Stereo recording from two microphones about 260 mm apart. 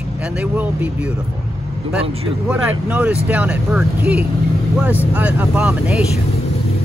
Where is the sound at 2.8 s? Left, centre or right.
Centre.